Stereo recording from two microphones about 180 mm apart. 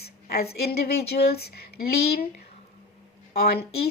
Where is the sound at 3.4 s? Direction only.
60° left (ahead or behind).